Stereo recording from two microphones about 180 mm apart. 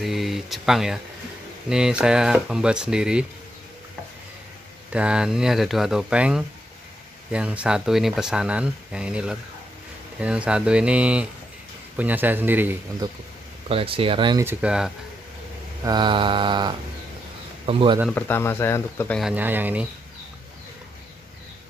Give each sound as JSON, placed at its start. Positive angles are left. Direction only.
{"t": 0.0, "sound": "speech", "side_deg": 0}
{"t": 4.9, "sound": "speech", "side_deg": -5}
{"t": 13.7, "sound": "speech", "side_deg": -30}
{"t": 14.4, "sound": "speech", "side_deg": -10}
{"t": 15.8, "sound": "mantra", "side_deg": -25}
{"t": 17.6, "sound": "speech", "side_deg": -30}
{"t": 18.1, "sound": "speech", "side_deg": 10}
{"t": 19.1, "sound": "speech", "side_deg": -5}